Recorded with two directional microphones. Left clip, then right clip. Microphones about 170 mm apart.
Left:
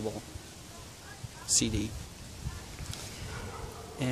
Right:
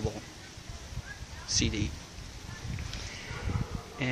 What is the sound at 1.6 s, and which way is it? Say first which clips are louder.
Speech: right 1 dB; 20° left (ahead or behind).